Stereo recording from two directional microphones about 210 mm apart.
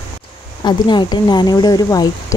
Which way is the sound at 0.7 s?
20° left (ahead or behind).